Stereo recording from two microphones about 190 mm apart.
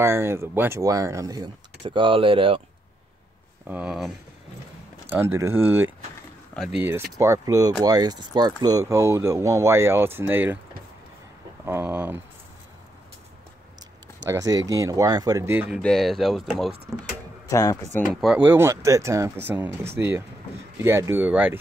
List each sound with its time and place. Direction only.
0.0 s speech: 15° right (ahead or behind)
3.6 s speech: 5° right (ahead or behind)
5.1 s speech: 10° right (ahead or behind)
6.5 s speech: centre (ahead or behind)
7.2 s speech: 15° right (ahead or behind)
11.6 s speech: 10° right (ahead or behind)
14.2 s speech: 20° right (ahead or behind)
15.8 s speech: centre (ahead or behind)
17.5 s speech: 20° left (ahead or behind)
18.1 s speech: 5° right (ahead or behind)